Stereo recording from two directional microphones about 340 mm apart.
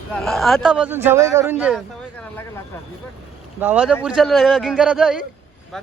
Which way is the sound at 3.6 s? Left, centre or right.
Centre.